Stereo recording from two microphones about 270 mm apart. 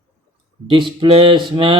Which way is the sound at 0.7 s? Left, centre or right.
Centre.